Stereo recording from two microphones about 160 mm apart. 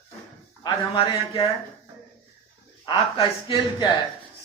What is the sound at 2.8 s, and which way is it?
Speech, 30° left (ahead or behind).